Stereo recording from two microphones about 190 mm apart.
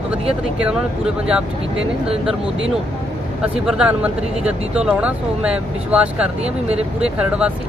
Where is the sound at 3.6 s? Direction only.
5° right (ahead or behind).